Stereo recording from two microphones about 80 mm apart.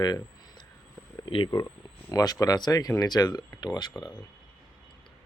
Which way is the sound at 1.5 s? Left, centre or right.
Left.